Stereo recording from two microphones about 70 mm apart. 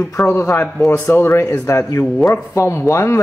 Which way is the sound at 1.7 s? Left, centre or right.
Left.